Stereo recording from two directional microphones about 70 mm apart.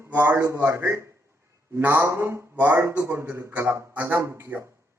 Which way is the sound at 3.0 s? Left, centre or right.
Right.